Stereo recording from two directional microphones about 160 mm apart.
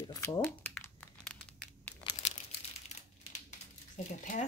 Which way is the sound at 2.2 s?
45° left (ahead or behind).